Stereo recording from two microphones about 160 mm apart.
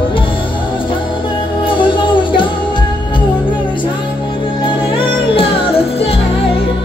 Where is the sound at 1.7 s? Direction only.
30° left (ahead or behind).